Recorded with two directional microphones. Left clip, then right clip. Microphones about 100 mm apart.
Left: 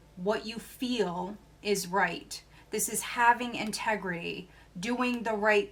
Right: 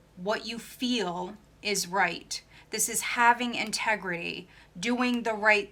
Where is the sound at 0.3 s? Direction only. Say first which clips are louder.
Even; 15° right (ahead or behind).